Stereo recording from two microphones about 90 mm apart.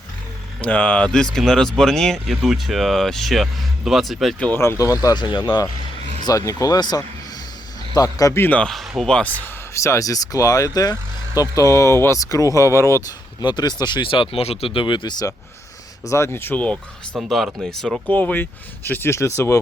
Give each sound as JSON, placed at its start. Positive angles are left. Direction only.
{"t": 0.6, "sound": "speech", "side_deg": 15}
{"t": 4.5, "sound": "speech", "side_deg": 25}
{"t": 4.8, "sound": "speech", "side_deg": 40}
{"t": 6.2, "sound": "speech", "side_deg": 40}
{"t": 8.4, "sound": "speech", "side_deg": 20}
{"t": 8.6, "sound": "speech", "side_deg": 0}
{"t": 9.7, "sound": "speech", "side_deg": 35}
{"t": 13.4, "sound": "speech", "side_deg": 55}
{"t": 16.0, "sound": "speech", "side_deg": 30}
{"t": 17.2, "sound": "speech", "side_deg": 0}
{"t": 18.1, "sound": "speech", "side_deg": 20}